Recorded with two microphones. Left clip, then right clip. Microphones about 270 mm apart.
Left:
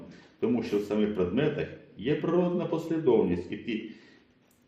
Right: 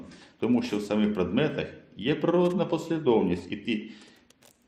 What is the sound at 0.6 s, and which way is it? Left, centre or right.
A man's voice, right.